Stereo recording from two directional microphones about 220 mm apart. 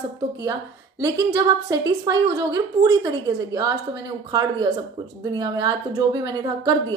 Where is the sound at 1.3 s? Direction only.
15° right (ahead or behind).